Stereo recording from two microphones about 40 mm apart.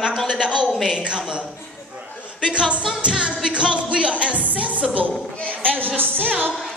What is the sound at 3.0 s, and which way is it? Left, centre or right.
Music, right.